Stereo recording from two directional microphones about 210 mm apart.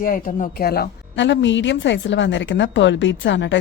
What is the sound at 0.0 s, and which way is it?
A woman's voice, 45° left (ahead or behind).